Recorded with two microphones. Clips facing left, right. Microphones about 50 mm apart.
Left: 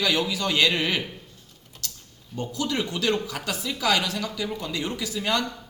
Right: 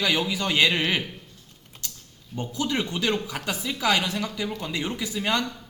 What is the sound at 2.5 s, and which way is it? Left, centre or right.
Speech, right.